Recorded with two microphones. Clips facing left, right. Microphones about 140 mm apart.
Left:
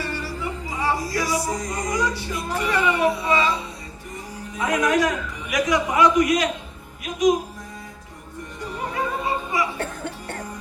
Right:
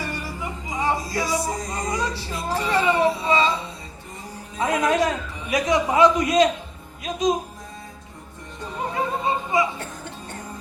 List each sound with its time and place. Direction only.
0.0 s music: 15° right (ahead or behind)
4.5 s a man's voice: 25° right (ahead or behind)
9.0 s music: 25° right (ahead or behind)